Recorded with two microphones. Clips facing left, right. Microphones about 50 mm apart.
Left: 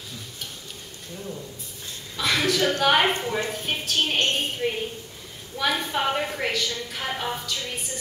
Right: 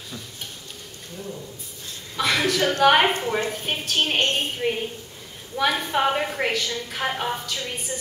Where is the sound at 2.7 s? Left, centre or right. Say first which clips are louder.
Right 7 dB; centre.